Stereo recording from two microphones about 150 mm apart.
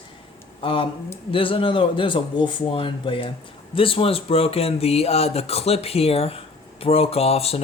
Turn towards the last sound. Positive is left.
turn(degrees=40)  # may be behind; listen again after turning